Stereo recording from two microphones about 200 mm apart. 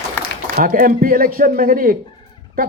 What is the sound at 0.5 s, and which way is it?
Speech, 45° right (ahead or behind).